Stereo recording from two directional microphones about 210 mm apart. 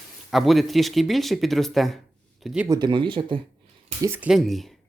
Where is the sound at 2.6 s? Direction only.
20° right (ahead or behind).